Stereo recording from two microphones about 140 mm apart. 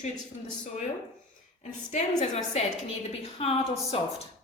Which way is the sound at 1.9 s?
55° left (ahead or behind).